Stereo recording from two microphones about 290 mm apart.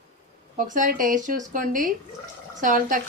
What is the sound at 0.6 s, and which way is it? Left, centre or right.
Speech, right.